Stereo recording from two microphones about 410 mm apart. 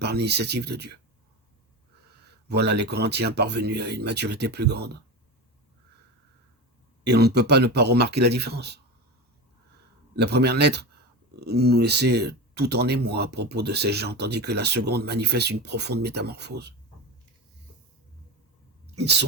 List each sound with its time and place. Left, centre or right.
0.0 s speech: right
2.2 s speech: right
7.0 s speech: right
10.2 s speech: right
18.9 s speech: right